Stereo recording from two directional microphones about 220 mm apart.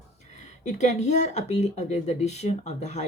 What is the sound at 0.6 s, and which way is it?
Speech, 30° left (ahead or behind).